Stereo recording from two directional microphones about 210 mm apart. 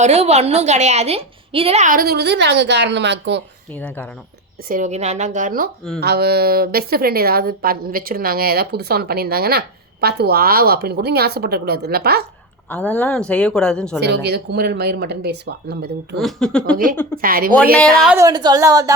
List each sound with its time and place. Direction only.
0.0 s a woman's voice: 30° right (ahead or behind); by 3.4 s 55° right (ahead or behind)
3.7 s speech: 10° left (ahead or behind)
4.7 s a woman's voice: 35° right (ahead or behind)
12.6 s a woman's voice: 10° left (ahead or behind)
14.0 s speech: 50° right (ahead or behind)
16.1 s a woman's voice: centre (ahead or behind)
17.2 s speech: 45° right (ahead or behind)
17.7 s a woman's voice: centre (ahead or behind)
18.2 s a woman's voice: 20° right (ahead or behind)